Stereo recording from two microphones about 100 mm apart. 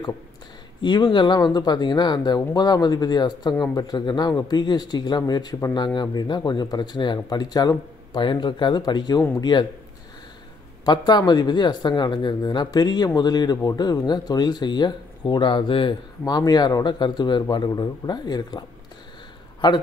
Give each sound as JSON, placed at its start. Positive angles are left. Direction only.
{"t": 0.8, "sound": "speech", "side_deg": 50}
{"t": 10.9, "sound": "speech", "side_deg": 45}
{"t": 16.3, "sound": "speech", "side_deg": 45}
{"t": 19.6, "sound": "speech", "side_deg": 50}